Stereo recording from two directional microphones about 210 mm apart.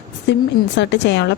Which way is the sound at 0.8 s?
60° left (ahead or behind).